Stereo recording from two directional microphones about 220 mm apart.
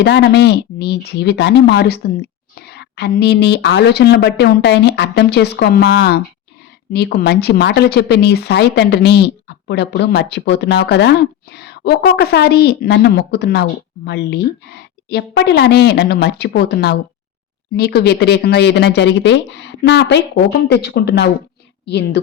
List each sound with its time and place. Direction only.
0.0 s speech: 50° left (ahead or behind)